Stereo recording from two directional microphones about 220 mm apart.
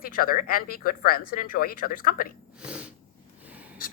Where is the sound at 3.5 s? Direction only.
5° right (ahead or behind).